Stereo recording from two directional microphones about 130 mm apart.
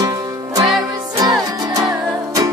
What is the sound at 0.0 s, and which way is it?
Music, 30° right (ahead or behind).